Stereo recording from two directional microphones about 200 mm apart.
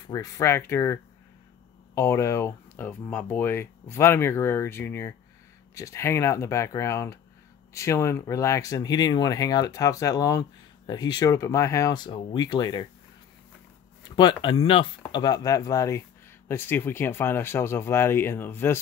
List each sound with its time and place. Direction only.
0.0 s speech: 15° left (ahead or behind)
2.0 s speech: 15° left (ahead or behind)
14.0 s speech: 20° left (ahead or behind)